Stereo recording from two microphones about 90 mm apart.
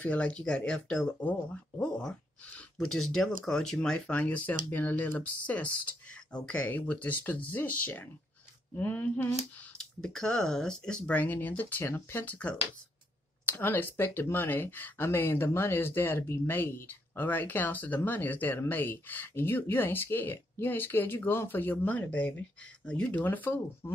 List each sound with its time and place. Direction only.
0.0 s speech: 15° left (ahead or behind)
9.8 s speech: 10° left (ahead or behind); by 12.4 s 25° left (ahead or behind)
13.5 s speech: 20° left (ahead or behind)